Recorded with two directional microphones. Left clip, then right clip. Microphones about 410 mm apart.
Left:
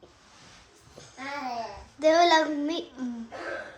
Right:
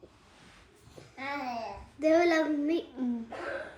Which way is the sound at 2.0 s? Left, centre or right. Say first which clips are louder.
Left 5 dB; centre.